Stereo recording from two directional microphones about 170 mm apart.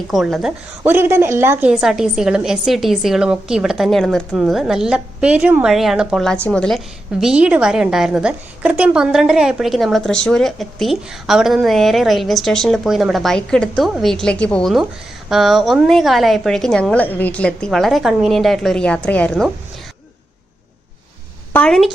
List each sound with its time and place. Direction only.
0.1 s a woman's voice: centre (ahead or behind)
0.9 s a woman's voice: 15° right (ahead or behind); by 19.5 s 5° left (ahead or behind)
21.5 s a woman's voice: 5° left (ahead or behind)